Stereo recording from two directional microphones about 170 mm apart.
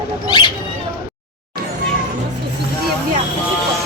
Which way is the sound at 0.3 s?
30° left (ahead or behind).